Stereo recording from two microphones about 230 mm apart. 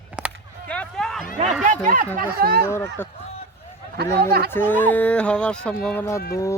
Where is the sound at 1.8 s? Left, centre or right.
Right.